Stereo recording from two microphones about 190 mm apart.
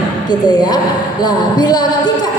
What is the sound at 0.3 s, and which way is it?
Music, 20° left (ahead or behind).